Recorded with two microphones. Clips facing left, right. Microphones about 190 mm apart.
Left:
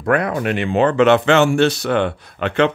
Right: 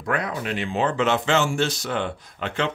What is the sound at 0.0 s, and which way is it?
Speech, 60° left (ahead or behind).